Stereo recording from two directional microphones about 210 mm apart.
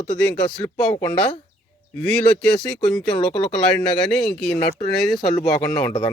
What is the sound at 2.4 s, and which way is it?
Speech, centre (ahead or behind).